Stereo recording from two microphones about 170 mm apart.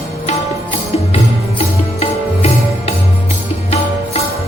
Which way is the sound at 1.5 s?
35° left (ahead or behind).